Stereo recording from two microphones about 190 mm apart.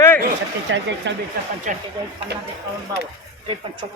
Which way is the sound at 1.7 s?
40° right (ahead or behind).